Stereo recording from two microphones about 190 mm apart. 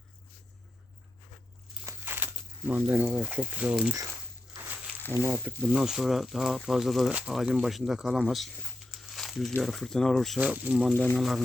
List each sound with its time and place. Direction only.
1.9 s speech: 10° right (ahead or behind)
5.1 s speech: 15° right (ahead or behind)
5.6 s speech: 5° right (ahead or behind)
8.9 s crumpling: centre (ahead or behind)
9.6 s speech: centre (ahead or behind)
10.9 s speech: 5° left (ahead or behind)